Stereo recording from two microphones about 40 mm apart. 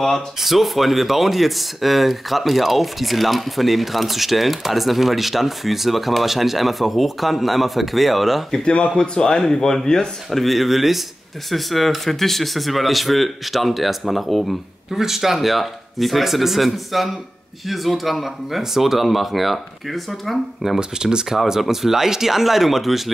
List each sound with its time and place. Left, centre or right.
0.4 s speech: centre
8.5 s speech: left
10.4 s speech: centre
20.6 s speech: centre